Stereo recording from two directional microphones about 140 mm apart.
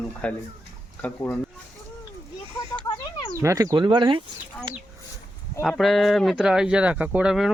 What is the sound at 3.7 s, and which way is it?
Speech, 35° right (ahead or behind).